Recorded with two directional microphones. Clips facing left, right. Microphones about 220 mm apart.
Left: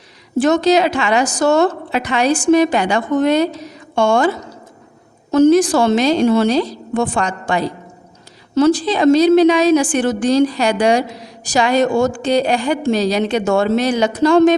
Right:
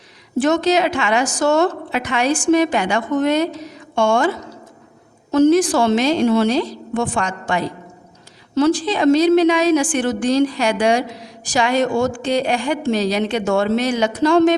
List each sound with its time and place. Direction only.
0.3 s a woman's voice: 35° left (ahead or behind)
5.3 s a woman's voice: 40° left (ahead or behind)